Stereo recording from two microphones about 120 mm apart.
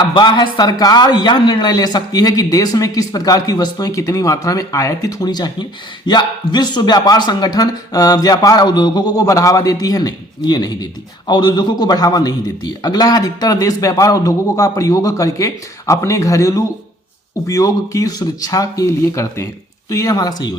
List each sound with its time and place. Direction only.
0.1 s a man's voice: 40° left (ahead or behind)